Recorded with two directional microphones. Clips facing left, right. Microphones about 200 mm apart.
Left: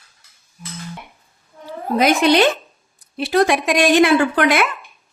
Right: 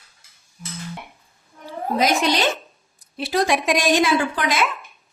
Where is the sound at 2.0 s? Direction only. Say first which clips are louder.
Left 6 dB; 60° left (ahead or behind).